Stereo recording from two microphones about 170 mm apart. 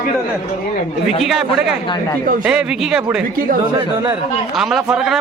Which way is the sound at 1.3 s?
5° right (ahead or behind).